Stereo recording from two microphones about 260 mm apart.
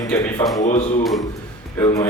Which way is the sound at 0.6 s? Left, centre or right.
Left.